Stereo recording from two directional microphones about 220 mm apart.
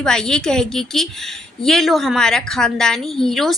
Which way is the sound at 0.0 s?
5° left (ahead or behind).